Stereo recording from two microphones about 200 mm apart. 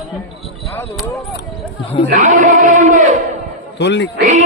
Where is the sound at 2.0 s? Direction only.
40° right (ahead or behind).